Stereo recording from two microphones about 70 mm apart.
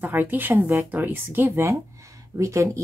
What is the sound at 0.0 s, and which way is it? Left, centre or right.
Speech, right.